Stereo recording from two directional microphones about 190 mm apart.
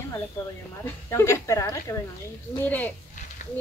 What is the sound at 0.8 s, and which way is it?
Speech, 15° left (ahead or behind).